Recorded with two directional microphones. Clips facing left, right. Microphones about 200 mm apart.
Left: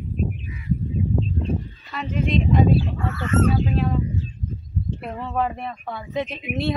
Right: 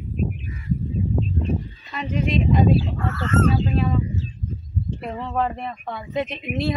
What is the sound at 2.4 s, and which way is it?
Speech, centre (ahead or behind).